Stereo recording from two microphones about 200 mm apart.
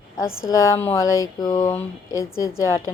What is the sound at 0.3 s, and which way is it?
Speech, 90° left.